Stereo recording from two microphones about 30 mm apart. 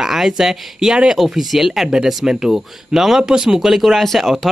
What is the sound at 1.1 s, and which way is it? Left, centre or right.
Speech, centre.